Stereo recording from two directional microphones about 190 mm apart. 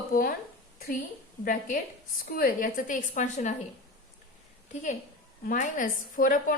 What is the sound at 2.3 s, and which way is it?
A woman's voice, 50° left (ahead or behind).